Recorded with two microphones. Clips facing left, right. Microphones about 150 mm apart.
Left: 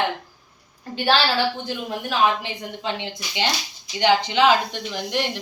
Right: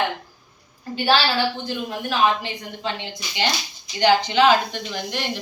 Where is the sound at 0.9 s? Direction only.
10° right (ahead or behind).